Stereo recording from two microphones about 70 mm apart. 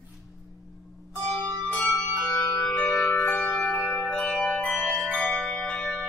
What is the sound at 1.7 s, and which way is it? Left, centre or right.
Music, left.